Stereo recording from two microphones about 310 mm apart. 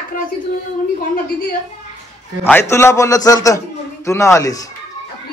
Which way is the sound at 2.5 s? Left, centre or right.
Centre.